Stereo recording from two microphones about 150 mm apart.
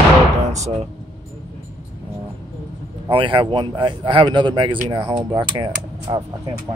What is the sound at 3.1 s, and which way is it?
Speech, 35° right (ahead or behind).